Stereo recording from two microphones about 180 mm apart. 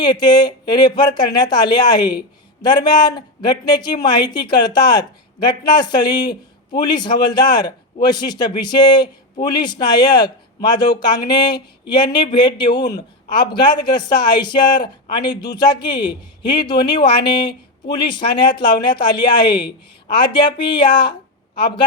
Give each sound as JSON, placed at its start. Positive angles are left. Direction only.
{"t": 0.0, "sound": "speech", "side_deg": 25}